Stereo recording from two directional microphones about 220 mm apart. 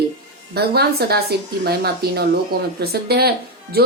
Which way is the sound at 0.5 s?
45° right (ahead or behind).